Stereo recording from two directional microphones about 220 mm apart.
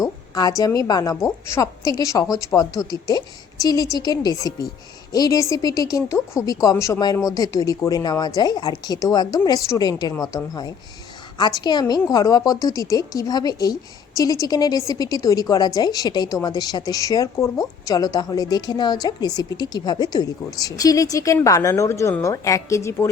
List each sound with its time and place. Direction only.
0.0 s a woman's voice: 15° left (ahead or behind)